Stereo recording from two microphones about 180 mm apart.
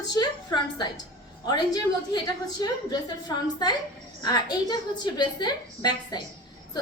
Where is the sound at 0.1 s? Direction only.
25° left (ahead or behind).